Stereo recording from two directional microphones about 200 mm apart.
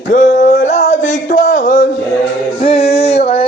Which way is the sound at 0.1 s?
35° left (ahead or behind).